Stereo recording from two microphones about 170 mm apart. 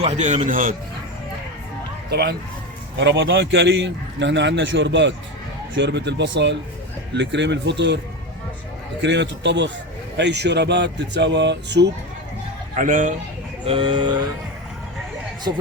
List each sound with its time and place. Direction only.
0.0 s a man's voice: 40° right (ahead or behind)
2.0 s speech: 70° right (ahead or behind)
3.0 s a man's voice: 90° right
9.0 s a man's voice: 90° right
12.7 s a man's voice: 55° right (ahead or behind)
13.7 s speech: 30° right (ahead or behind)